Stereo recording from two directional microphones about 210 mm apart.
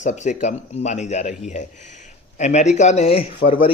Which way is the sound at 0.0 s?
35° left (ahead or behind).